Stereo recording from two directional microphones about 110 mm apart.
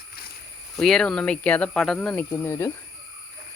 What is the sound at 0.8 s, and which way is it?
Speech, 5° left (ahead or behind).